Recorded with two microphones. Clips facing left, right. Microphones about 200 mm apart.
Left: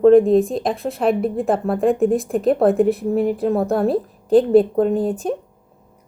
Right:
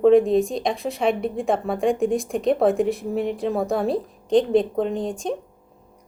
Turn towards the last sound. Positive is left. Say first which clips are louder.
# left 6 dB
turn(degrees=5)  # may be behind; listen again after turning